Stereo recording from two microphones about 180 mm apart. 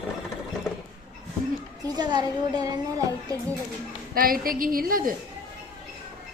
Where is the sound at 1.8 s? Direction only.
25° right (ahead or behind).